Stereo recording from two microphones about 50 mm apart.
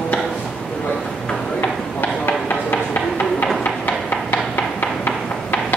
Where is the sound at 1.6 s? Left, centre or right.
Left.